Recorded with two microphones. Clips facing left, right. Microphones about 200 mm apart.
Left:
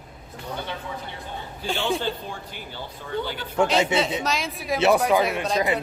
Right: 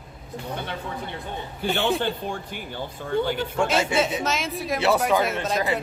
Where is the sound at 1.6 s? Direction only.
55° right (ahead or behind).